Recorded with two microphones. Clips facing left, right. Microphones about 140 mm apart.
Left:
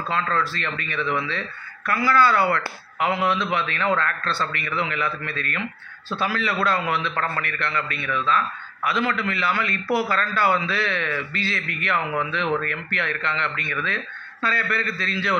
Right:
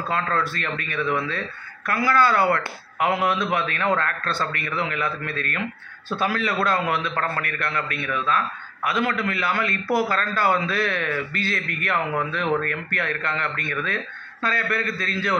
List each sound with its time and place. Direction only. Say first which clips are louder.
0.1 s a man's voice: even; 50° right (ahead or behind)